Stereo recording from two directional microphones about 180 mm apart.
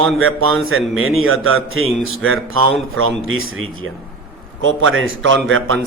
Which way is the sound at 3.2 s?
90° right.